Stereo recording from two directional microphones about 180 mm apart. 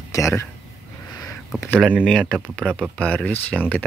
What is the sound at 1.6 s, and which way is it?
Speech, 10° left (ahead or behind).